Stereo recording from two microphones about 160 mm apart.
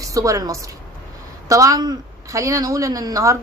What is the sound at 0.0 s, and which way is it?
A woman's voice, 20° right (ahead or behind).